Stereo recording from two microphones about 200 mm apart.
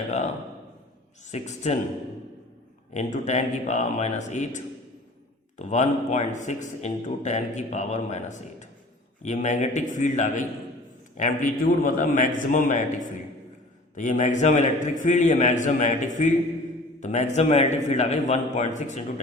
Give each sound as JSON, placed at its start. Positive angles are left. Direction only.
{"t": 1.3, "sound": "a man's voice", "side_deg": 35}
{"t": 2.9, "sound": "a man's voice", "side_deg": 35}